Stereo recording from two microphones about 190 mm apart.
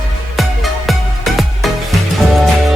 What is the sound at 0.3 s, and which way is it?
Music, centre (ahead or behind).